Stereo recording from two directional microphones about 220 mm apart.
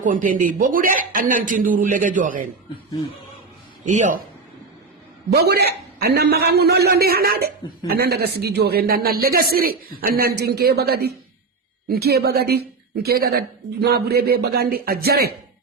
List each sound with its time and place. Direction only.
0.0 s speech: 35° right (ahead or behind)
3.8 s speech: 35° right (ahead or behind)
5.3 s a man's voice: 45° right (ahead or behind)